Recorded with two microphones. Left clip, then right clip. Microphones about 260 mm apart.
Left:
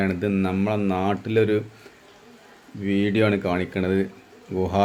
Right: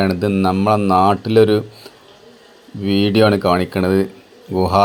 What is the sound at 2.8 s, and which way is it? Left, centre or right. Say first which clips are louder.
Speech: right 8 dB; centre.